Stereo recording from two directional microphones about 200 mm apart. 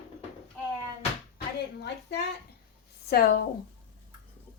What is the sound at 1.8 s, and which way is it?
A woman's voice, 55° left (ahead or behind).